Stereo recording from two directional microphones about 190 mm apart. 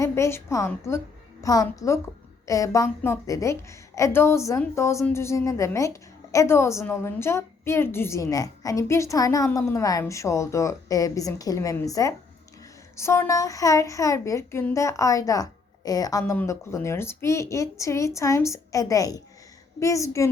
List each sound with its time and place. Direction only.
0.0 s a woman's voice: 15° left (ahead or behind)